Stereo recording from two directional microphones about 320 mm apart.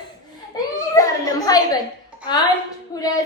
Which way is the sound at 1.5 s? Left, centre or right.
Centre.